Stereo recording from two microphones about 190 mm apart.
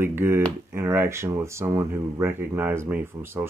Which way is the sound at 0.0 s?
10° right (ahead or behind).